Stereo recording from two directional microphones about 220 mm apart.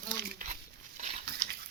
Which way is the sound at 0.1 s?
35° right (ahead or behind).